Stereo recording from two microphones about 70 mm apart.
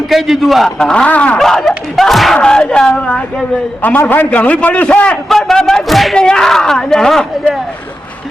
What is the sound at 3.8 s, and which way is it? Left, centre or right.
A man's voice, left.